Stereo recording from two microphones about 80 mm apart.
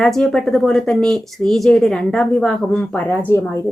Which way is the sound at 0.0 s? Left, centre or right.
Centre.